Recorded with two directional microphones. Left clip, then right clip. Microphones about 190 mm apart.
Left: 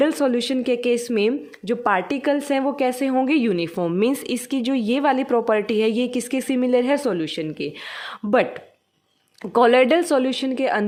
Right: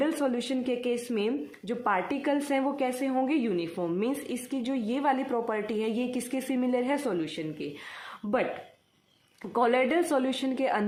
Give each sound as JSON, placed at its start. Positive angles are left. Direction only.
{"t": 0.0, "sound": "a woman's voice", "side_deg": 45}
{"t": 9.4, "sound": "a woman's voice", "side_deg": 50}